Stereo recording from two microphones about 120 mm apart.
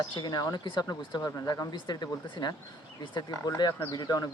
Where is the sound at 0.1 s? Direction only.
40° left (ahead or behind).